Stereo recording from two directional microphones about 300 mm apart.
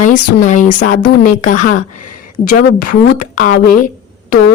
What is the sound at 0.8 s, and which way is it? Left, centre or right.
A woman's voice, left.